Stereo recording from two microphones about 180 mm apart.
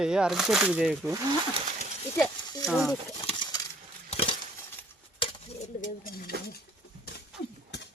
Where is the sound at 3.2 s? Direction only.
25° left (ahead or behind).